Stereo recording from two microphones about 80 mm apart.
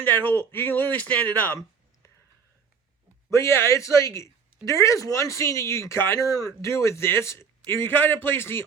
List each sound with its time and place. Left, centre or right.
0.0 s speech: left
3.2 s speech: left
6.1 s speech: left
6.6 s speech: left